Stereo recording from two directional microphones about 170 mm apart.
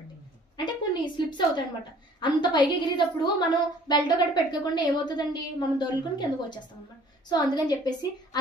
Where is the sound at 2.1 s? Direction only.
25° left (ahead or behind).